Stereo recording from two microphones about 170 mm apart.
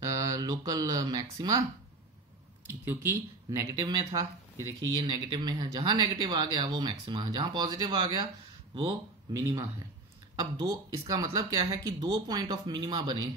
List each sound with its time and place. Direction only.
0.0 s speech: 20° right (ahead or behind)
2.8 s speech: 15° right (ahead or behind)